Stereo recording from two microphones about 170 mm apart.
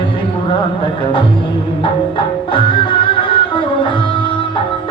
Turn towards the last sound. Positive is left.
turn(degrees=30)  # may be behind; listen again after turning